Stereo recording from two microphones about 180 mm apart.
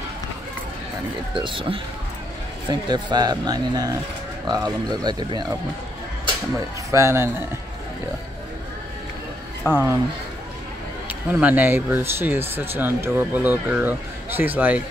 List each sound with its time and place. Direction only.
1.3 s speech: 30° right (ahead or behind)
6.9 s speech: 15° right (ahead or behind)
9.6 s speech: 15° left (ahead or behind)
11.1 s speech: 10° right (ahead or behind)